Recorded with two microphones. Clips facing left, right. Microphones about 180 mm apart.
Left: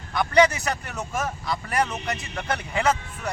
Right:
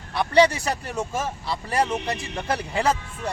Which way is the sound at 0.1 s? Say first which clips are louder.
Right 1 dB; 30° right (ahead or behind).